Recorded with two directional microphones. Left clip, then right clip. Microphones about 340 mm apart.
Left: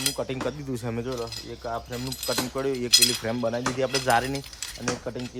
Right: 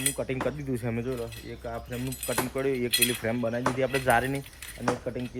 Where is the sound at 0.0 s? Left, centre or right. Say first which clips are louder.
Left 2 dB; centre.